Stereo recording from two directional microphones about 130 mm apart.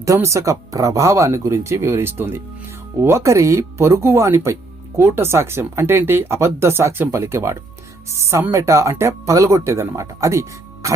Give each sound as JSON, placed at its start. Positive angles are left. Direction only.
{"t": 0.0, "sound": "speech", "side_deg": -25}